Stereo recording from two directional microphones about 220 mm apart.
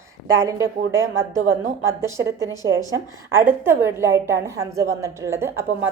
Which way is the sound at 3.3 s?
10° right (ahead or behind).